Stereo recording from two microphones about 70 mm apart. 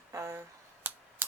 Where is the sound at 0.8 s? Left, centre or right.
Right.